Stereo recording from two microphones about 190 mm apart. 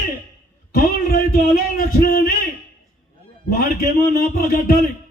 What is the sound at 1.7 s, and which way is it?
Speech, 50° left (ahead or behind).